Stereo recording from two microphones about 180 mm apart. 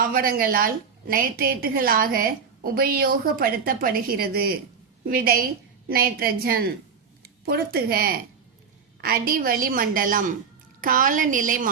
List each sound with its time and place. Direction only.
0.0 s a woman's voice: 55° right (ahead or behind)